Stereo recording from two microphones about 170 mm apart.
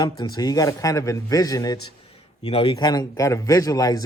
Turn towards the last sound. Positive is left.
turn(degrees=20)  # may be behind; listen again after turning